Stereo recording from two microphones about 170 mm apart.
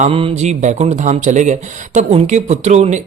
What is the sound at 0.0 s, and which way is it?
Speech, 30° right (ahead or behind).